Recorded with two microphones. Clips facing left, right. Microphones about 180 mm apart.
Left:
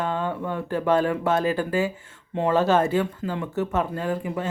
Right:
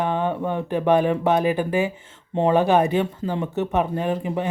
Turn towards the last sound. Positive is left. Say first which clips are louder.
# right 3 dB
turn(degrees=-20)  # may be behind; listen again after turning